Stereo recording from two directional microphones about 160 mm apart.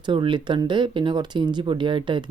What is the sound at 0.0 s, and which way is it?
Speech, 30° right (ahead or behind).